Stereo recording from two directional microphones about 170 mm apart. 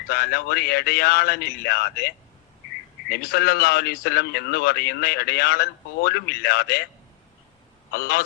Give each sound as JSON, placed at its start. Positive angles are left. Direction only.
{"t": 0.1, "sound": "a man's voice", "side_deg": 70}
{"t": 7.9, "sound": "a man's voice", "side_deg": 65}